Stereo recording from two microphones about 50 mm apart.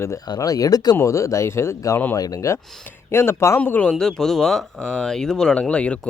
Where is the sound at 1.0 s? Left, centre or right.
Left.